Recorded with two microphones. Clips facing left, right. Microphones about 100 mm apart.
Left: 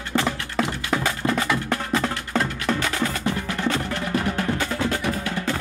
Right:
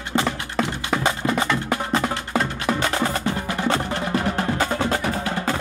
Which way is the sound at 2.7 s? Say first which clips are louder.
Right 3 dB; 30° right (ahead or behind).